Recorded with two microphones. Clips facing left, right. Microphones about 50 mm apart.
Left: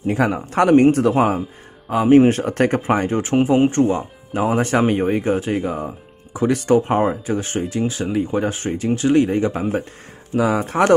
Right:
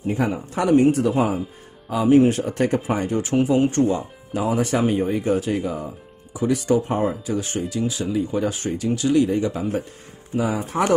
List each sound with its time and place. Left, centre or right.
0.0 s a man's voice: left
1.9 s speech: left
3.1 s speech: left
5.3 s speech: left
5.7 s music: left
6.4 s speech: left
7.2 s speech: left
10.3 s speech: left